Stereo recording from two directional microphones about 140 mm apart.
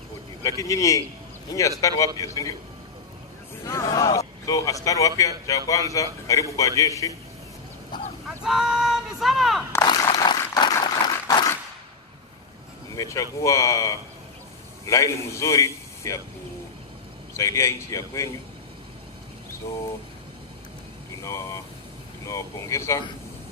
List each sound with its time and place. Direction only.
0.4 s speech: 25° left (ahead or behind)
3.6 s speech: 25° left (ahead or behind)
7.9 s a sound: 30° left (ahead or behind)
8.5 s speech: 5° right (ahead or behind)
9.8 s a sound: 25° left (ahead or behind)
12.9 s speech: 25° left (ahead or behind)
17.3 s speech: 20° left (ahead or behind)
21.2 s speech: 20° left (ahead or behind)